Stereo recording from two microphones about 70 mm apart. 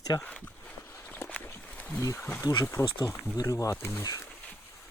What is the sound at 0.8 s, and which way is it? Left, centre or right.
Walk, left.